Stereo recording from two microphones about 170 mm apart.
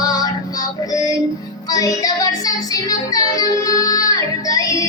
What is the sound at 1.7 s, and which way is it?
Music, 20° left (ahead or behind).